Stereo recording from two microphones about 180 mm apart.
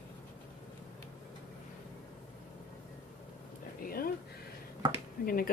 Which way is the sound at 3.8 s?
55° left (ahead or behind).